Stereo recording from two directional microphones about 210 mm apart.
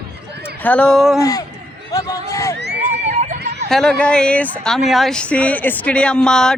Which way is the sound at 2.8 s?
35° right (ahead or behind).